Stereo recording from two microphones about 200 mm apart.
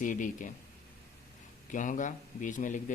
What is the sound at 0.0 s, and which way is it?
Speech, 40° left (ahead or behind).